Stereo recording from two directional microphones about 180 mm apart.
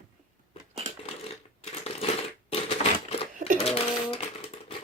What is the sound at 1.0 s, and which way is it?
Coin, 35° left (ahead or behind).